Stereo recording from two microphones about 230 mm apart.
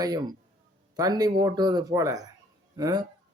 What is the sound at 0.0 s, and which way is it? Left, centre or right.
Speech, centre.